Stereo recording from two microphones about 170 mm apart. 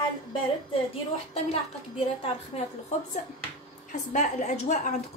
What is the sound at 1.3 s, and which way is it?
A child's voice, 35° left (ahead or behind).